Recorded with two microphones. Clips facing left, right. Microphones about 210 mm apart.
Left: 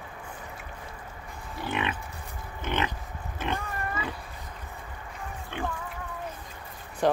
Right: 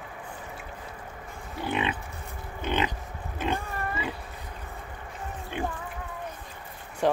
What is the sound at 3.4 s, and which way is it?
Pig, 15° right (ahead or behind).